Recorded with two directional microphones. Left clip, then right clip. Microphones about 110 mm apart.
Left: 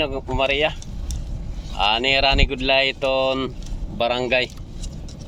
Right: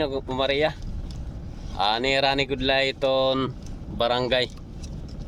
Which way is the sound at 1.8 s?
35° right (ahead or behind).